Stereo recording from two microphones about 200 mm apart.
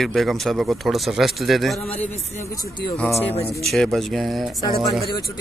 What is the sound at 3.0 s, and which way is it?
Speech, 10° left (ahead or behind).